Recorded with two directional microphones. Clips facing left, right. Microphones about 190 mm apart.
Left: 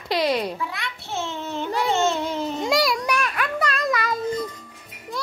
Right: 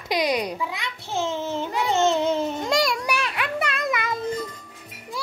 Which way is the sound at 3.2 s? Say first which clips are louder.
Left 2 dB; 25° right (ahead or behind).